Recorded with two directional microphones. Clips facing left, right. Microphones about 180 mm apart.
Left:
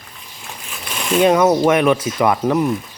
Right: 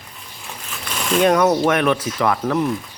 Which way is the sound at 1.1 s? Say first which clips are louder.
Left 2 dB; 10° left (ahead or behind).